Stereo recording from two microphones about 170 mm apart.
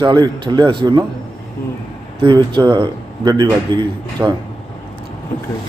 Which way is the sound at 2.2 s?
30° right (ahead or behind).